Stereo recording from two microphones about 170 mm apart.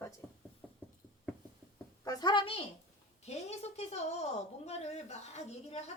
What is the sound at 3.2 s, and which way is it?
A woman's voice, 40° left (ahead or behind).